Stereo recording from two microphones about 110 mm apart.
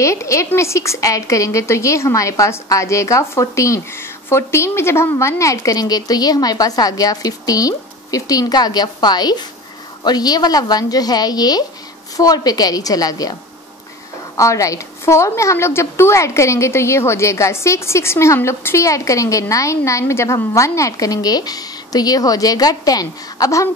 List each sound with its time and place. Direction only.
0.0 s a woman's voice: 25° left (ahead or behind)